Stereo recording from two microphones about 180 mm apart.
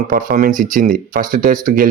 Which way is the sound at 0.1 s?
45° right (ahead or behind).